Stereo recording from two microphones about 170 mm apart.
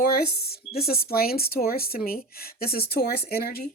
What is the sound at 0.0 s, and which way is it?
Speech, 65° left (ahead or behind).